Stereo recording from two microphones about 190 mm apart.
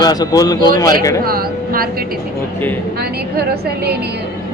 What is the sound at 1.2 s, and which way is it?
Vehicle, 50° right (ahead or behind).